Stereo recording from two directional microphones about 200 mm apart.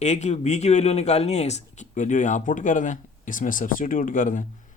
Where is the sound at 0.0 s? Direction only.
35° left (ahead or behind).